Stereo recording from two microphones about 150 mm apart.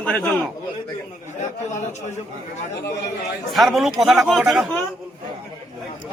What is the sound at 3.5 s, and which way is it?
Speech, centre (ahead or behind).